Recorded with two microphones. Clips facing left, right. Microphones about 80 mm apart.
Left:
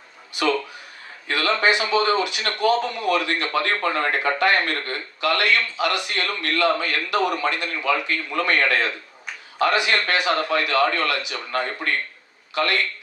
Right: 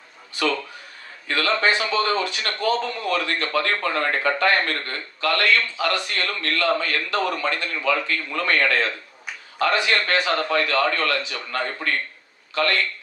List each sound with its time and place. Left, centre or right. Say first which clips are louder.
1.3 s speech: left 1 dB; centre